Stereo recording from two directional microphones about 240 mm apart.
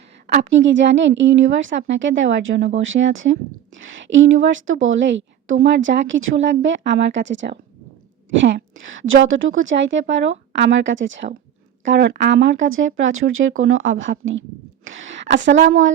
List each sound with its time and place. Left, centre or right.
0.3 s speech: right